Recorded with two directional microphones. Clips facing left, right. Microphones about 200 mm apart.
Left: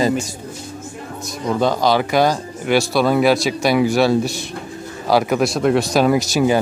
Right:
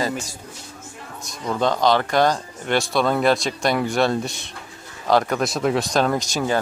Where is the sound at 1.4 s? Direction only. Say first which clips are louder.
Left 2 dB; 10° left (ahead or behind).